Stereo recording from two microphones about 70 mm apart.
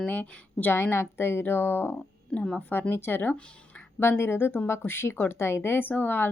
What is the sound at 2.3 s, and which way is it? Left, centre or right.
Speech, centre.